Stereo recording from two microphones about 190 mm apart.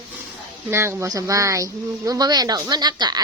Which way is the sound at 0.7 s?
15° right (ahead or behind).